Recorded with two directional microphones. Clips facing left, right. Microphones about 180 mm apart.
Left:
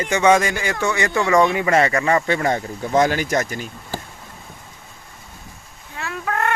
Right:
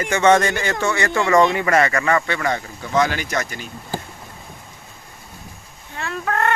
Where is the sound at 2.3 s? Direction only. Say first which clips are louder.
Left 3 dB; 40° left (ahead or behind).